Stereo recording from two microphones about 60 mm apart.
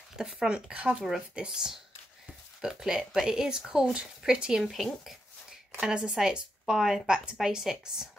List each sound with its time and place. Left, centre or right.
0.2 s a woman's voice: centre
4.6 s speech: centre
5.8 s a woman's voice: centre